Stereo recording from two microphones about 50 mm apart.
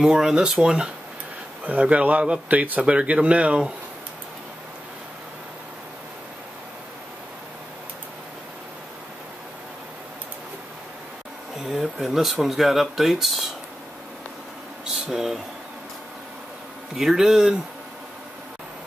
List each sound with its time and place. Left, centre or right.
0.0 s speech: centre
1.6 s speech: right
11.6 s speech: centre
15.0 s speech: centre
16.9 s speech: centre